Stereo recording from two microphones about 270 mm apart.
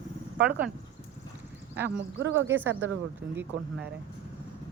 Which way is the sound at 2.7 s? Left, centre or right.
Right.